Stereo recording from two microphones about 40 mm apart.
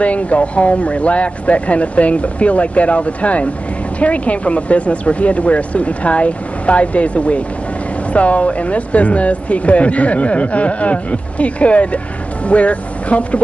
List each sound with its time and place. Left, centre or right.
0.0 s speech: left